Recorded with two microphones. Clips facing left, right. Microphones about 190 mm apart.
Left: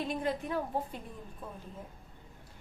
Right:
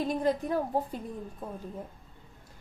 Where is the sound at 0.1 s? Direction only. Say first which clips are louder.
Right 5 dB; 40° right (ahead or behind).